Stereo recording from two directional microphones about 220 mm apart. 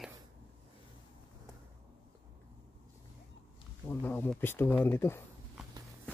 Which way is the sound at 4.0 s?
10° left (ahead or behind).